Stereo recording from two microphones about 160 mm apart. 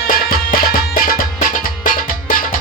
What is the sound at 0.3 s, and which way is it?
Music, 65° left (ahead or behind).